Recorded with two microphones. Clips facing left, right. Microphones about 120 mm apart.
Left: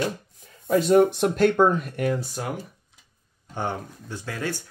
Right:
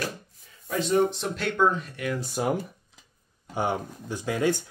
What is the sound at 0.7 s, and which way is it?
Speech, 50° left (ahead or behind).